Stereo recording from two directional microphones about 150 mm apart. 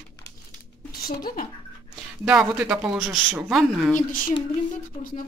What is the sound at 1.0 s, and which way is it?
Speech, 70° left (ahead or behind).